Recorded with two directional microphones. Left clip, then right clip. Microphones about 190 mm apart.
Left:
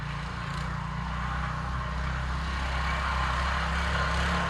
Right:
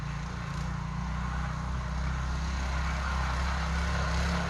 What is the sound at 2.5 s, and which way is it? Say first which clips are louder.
Vehicle: left 6 dB; 20° left (ahead or behind).